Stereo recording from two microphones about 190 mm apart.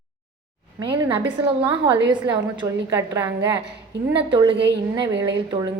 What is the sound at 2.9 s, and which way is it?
Speech, 10° right (ahead or behind).